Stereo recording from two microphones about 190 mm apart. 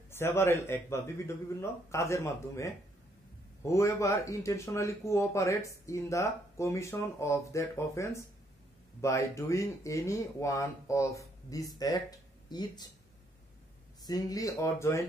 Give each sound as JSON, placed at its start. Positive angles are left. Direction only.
{"t": 0.1, "sound": "speech", "side_deg": 10}
{"t": 14.0, "sound": "speech", "side_deg": 20}